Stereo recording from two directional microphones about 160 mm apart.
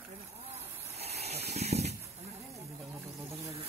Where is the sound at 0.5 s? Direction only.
40° right (ahead or behind).